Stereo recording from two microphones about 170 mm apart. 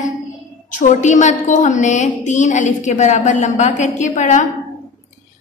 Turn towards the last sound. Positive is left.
turn(degrees=45)  # may be behind; listen again after turning